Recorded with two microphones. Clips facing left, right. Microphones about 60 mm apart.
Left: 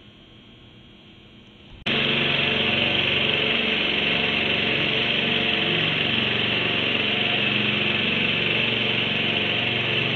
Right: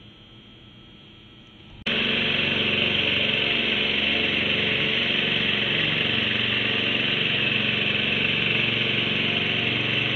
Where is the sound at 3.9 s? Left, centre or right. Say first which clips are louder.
Left 1 dB; left.